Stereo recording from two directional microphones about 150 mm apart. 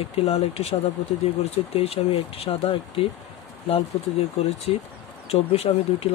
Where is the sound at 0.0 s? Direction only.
40° left (ahead or behind).